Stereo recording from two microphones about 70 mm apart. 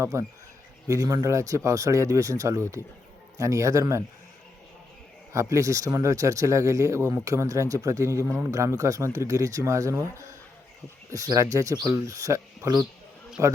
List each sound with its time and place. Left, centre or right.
0.0 s speech: right
0.9 s speech: right
5.3 s speech: right
11.1 s speech: right